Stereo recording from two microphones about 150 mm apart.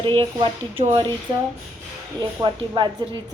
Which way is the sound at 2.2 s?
30° right (ahead or behind).